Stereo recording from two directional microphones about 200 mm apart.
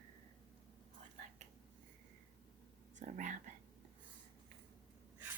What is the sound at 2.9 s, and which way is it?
Whispering, 35° right (ahead or behind).